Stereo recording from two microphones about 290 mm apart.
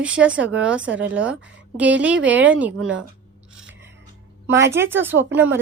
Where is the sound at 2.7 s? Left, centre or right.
Right.